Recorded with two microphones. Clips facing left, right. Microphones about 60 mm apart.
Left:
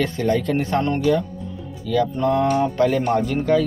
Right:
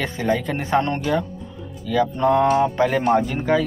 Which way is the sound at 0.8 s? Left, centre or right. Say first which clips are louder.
Left 2 dB; right.